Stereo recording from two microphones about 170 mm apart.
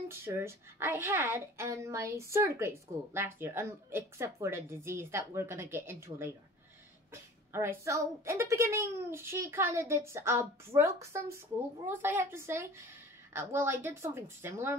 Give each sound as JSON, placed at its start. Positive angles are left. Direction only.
{"t": 0.1, "sound": "a woman's voice", "side_deg": -15}